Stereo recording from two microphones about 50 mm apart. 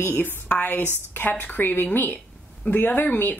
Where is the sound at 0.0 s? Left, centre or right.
Left.